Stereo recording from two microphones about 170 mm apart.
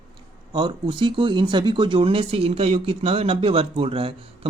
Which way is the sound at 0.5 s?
30° right (ahead or behind).